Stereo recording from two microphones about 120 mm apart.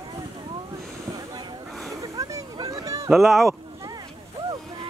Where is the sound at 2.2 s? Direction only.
30° right (ahead or behind).